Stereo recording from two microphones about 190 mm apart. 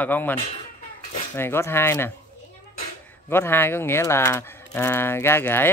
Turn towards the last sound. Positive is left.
turn(degrees=10)  # may be behind; listen again after turning